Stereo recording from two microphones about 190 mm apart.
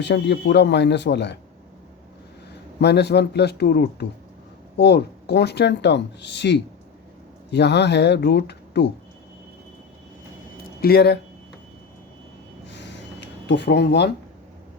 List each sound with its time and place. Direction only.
0.0 s speech: 65° left (ahead or behind)
2.8 s speech: 60° left (ahead or behind)
10.8 s speech: 55° left (ahead or behind)
12.6 s reversing beeps: 70° left (ahead or behind)